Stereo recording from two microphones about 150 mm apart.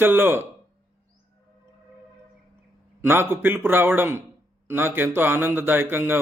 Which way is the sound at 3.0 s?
15° right (ahead or behind).